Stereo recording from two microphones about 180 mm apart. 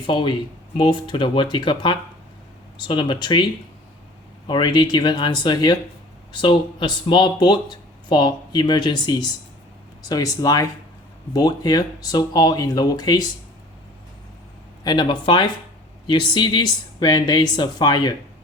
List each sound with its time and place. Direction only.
0.0 s speech: 25° left (ahead or behind)
4.4 s speech: 25° left (ahead or behind)
14.8 s speech: 25° left (ahead or behind)